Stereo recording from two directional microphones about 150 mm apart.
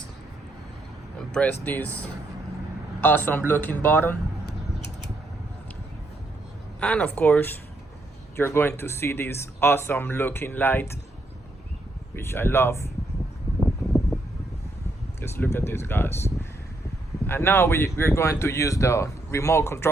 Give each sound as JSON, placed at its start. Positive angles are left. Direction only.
{"t": 1.3, "sound": "speech", "side_deg": 10}
{"t": 3.0, "sound": "speech", "side_deg": 10}
{"t": 6.7, "sound": "speech", "side_deg": 10}
{"t": 12.1, "sound": "speech", "side_deg": 15}
{"t": 13.6, "sound": "a sound", "side_deg": 0}
{"t": 15.2, "sound": "speech", "side_deg": 15}